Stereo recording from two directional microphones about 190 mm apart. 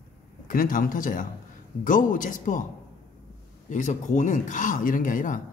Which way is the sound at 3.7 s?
40° left (ahead or behind).